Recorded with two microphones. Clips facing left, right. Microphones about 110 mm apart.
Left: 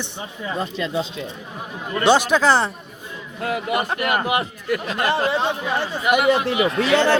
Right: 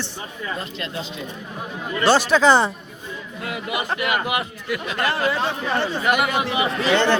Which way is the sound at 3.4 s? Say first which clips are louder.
Left 4 dB; 45° left (ahead or behind).